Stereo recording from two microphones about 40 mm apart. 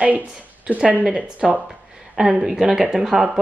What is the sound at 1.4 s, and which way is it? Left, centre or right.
Speech, centre.